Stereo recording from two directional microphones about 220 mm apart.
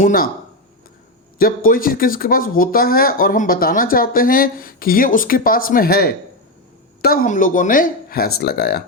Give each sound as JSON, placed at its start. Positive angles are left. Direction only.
{"t": 0.0, "sound": "speech", "side_deg": 40}
{"t": 1.4, "sound": "speech", "side_deg": 40}